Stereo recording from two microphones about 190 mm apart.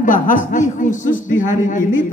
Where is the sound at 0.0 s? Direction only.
45° left (ahead or behind).